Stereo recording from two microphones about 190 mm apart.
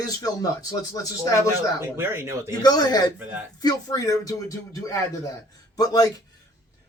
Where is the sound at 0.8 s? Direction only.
20° left (ahead or behind).